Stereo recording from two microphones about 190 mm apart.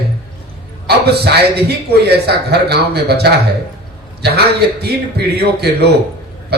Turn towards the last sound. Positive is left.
turn(degrees=-60)  # may be behind; listen again after turning